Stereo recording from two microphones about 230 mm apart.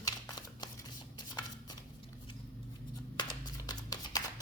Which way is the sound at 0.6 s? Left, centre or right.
Centre.